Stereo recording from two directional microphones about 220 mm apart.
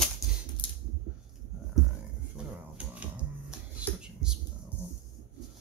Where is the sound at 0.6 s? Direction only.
25° left (ahead or behind).